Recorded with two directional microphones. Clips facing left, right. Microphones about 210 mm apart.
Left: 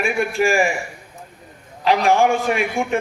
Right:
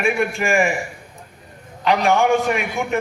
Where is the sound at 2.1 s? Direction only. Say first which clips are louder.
Right 1 dB; 35° left (ahead or behind).